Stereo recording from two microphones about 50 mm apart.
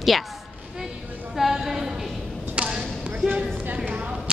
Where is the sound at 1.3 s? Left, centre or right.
Centre.